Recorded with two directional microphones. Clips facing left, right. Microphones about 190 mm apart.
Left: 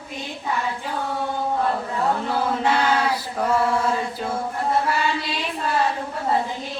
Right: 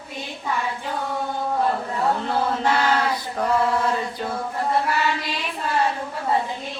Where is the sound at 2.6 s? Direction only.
5° left (ahead or behind).